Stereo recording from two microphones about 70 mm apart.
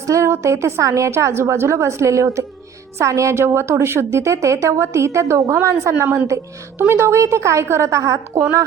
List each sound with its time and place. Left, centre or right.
0.1 s a woman's voice: right
5.9 s a woman's voice: right